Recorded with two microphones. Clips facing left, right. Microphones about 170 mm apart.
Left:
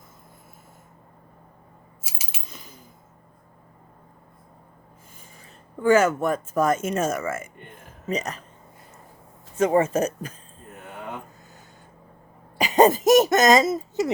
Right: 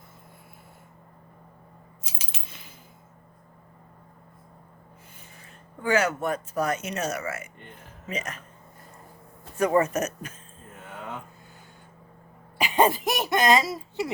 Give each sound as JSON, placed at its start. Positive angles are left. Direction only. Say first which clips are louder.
{"t": 2.0, "sound": "a sound", "louder": "left 1 dB", "side_deg": 10}
{"t": 2.5, "sound": "coin", "louder": "left 4 dB", "side_deg": 45}
{"t": 5.8, "sound": "speech", "louder": "left 6 dB", "side_deg": 50}
{"t": 9.6, "sound": "speech", "louder": "left 3 dB", "side_deg": 25}
{"t": 12.5, "sound": "speech", "louder": "left 5 dB", "side_deg": 40}